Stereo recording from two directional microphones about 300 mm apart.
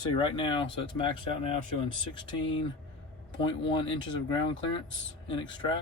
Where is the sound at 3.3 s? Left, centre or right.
Centre.